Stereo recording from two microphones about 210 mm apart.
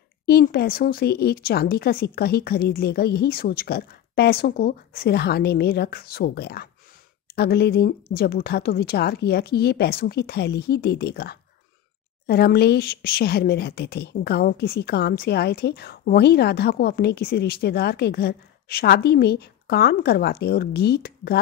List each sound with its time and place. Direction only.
0.3 s speech: 50° left (ahead or behind)